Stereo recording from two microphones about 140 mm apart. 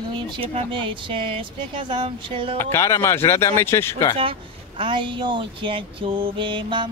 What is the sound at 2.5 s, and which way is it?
Speech, 15° left (ahead or behind).